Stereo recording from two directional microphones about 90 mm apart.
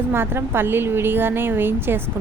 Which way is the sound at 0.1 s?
25° right (ahead or behind).